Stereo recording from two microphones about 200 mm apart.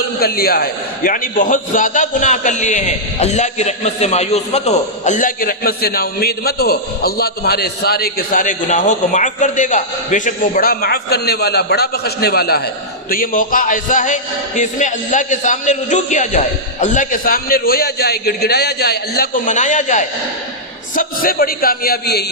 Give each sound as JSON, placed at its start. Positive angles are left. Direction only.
{"t": 0.2, "sound": "a man's voice", "side_deg": 50}